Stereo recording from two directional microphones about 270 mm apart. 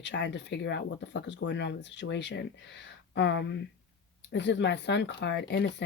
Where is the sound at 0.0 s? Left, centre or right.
Left.